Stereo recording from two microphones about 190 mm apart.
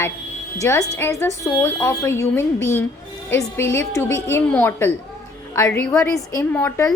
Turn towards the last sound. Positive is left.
turn(degrees=10)  # may be behind; listen again after turning